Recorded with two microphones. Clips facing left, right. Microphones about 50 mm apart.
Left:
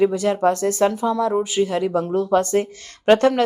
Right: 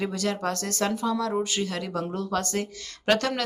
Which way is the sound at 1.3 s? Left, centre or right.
Centre.